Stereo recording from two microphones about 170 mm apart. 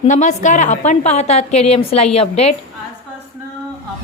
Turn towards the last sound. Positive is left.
turn(degrees=40)  # may be behind; listen again after turning